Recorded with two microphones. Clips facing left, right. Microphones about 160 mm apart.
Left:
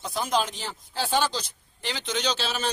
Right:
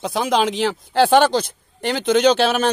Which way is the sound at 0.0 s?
85° right.